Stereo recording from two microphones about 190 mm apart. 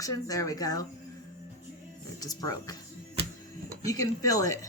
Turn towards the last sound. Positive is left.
turn(degrees=20)  # may be behind; listen again after turning